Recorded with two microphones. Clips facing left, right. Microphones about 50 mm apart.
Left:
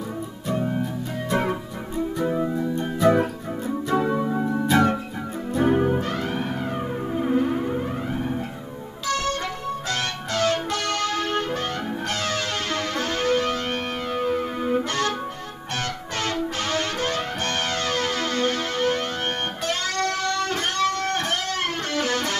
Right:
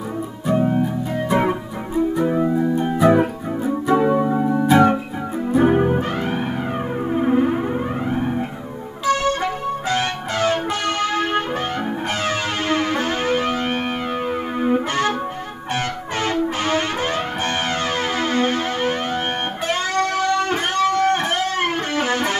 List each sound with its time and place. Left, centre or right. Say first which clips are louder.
0.5 s music: right 7 dB; centre
12.6 s music: right 6 dB; centre
16.2 s music: right 5 dB; centre
19.7 s guitar: right 5 dB; centre